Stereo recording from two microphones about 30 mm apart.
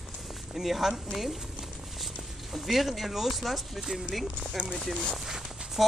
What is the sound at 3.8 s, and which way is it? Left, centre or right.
Speech, centre.